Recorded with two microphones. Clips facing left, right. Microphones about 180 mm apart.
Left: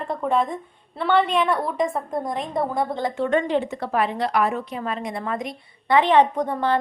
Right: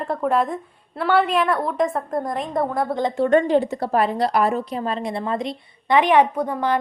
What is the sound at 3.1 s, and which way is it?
A woman's voice, 40° right (ahead or behind).